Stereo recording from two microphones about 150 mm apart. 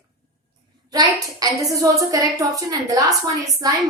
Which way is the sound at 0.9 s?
25° right (ahead or behind).